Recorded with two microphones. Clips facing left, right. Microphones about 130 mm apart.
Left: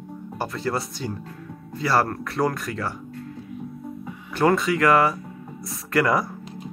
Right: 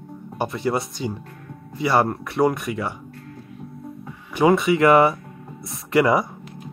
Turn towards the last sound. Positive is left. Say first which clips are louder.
# right 3 dB
turn(degrees=-25)  # may be behind; listen again after turning